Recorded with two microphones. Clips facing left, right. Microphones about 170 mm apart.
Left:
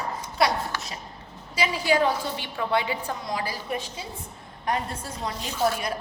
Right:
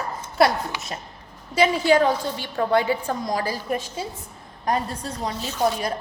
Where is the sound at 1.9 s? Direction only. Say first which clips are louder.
Right 4 dB; 45° right (ahead or behind).